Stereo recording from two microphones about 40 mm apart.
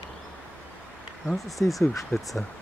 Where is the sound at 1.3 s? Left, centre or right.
Centre.